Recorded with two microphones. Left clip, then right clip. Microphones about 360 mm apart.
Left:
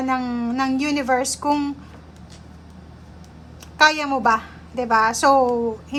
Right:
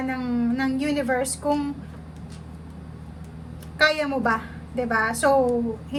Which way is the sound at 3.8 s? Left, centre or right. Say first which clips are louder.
Left 4 dB; centre.